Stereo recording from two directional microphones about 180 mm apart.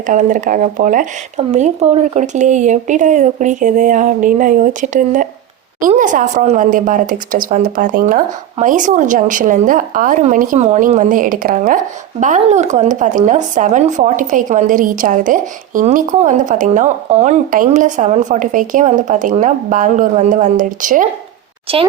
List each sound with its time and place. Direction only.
0.0 s speech: 45° right (ahead or behind)
21.7 s a child's voice: 30° right (ahead or behind)